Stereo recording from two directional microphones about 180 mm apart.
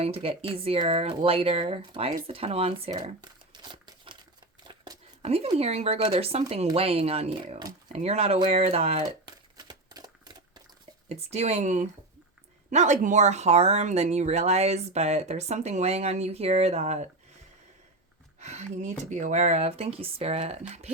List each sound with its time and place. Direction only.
0.0 s speech: 30° right (ahead or behind)
3.5 s crumpling: 25° right (ahead or behind)
5.2 s speech: 35° right (ahead or behind)
9.2 s typewriter: 25° right (ahead or behind)
11.1 s speech: 35° right (ahead or behind)
18.3 s speech: 40° right (ahead or behind)